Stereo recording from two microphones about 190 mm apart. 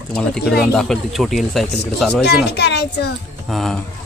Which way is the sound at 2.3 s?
65° left (ahead or behind).